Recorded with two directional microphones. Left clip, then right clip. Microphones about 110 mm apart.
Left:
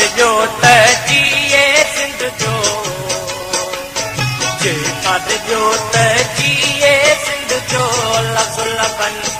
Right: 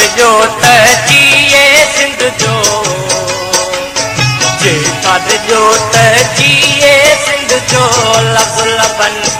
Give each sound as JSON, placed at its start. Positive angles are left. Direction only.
{"t": 0.0, "sound": "music", "side_deg": 40}
{"t": 2.4, "sound": "music of bollywood", "side_deg": 35}
{"t": 4.2, "sound": "music", "side_deg": 35}